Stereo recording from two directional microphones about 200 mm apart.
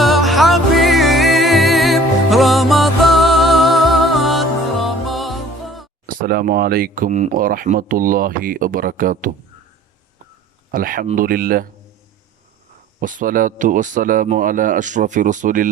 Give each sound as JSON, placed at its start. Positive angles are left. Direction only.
{"t": 0.0, "sound": "music", "side_deg": 0}
{"t": 6.1, "sound": "speech", "side_deg": -45}
{"t": 10.7, "sound": "speech", "side_deg": -45}
{"t": 13.0, "sound": "speech", "side_deg": -45}